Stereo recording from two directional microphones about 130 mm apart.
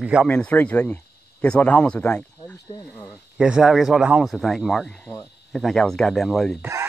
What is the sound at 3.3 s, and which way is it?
Speech, 5° right (ahead or behind).